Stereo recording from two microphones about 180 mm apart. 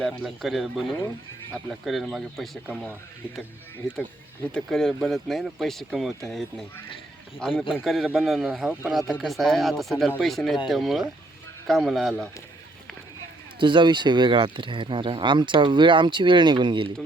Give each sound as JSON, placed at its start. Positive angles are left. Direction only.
{"t": 0.0, "sound": "a man's voice", "side_deg": 0}
{"t": 4.5, "sound": "a man's voice", "side_deg": 0}
{"t": 13.6, "sound": "speech", "side_deg": -25}